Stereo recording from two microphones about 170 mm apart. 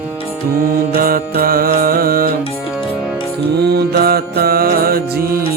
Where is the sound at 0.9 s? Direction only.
60° right (ahead or behind).